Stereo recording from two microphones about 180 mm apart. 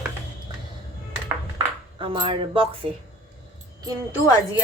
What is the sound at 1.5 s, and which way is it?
Speech, 30° right (ahead or behind).